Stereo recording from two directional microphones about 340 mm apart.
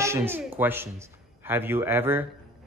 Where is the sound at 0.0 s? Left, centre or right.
Centre.